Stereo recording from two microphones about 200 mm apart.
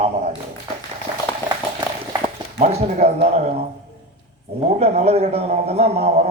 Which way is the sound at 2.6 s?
30° right (ahead or behind).